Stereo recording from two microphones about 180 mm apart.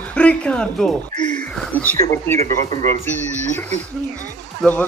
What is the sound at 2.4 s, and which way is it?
Speech, 35° right (ahead or behind).